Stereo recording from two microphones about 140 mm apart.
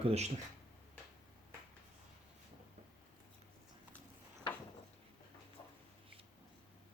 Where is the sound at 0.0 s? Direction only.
50° right (ahead or behind).